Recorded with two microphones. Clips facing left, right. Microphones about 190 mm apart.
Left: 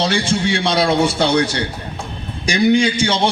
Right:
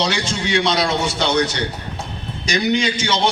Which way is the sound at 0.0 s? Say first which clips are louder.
Left 4 dB; 55° left (ahead or behind).